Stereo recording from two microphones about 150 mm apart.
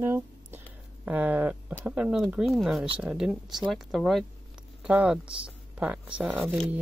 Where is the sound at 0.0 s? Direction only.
15° right (ahead or behind).